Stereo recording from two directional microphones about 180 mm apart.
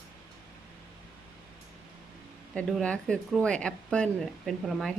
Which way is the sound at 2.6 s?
5° left (ahead or behind).